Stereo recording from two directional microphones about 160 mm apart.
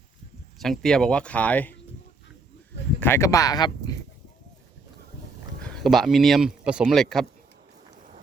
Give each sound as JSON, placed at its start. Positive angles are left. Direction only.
{"t": 0.6, "sound": "speech", "side_deg": 0}
{"t": 3.0, "sound": "speech", "side_deg": 15}
{"t": 5.6, "sound": "speech", "side_deg": 0}